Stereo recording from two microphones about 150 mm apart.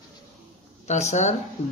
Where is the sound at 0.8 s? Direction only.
50° left (ahead or behind).